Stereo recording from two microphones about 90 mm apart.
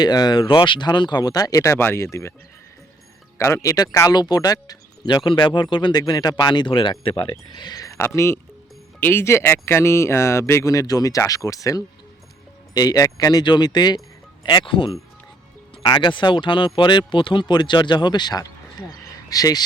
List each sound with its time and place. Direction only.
0.0 s speech: 50° left (ahead or behind); by 2.3 s 30° left (ahead or behind)
3.3 s speech: 30° left (ahead or behind)
4.1 s speech: 50° left (ahead or behind)
7.0 s speech: 80° left; by 14.0 s 50° left (ahead or behind)
14.4 s speech: 65° left (ahead or behind)
15.8 s speech: 55° left (ahead or behind)